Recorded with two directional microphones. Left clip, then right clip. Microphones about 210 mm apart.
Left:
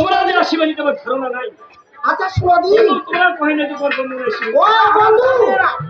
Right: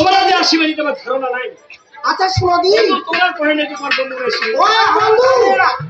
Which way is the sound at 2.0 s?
50° left (ahead or behind).